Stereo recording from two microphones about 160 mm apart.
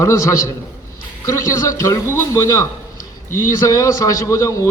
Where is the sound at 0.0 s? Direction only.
20° left (ahead or behind).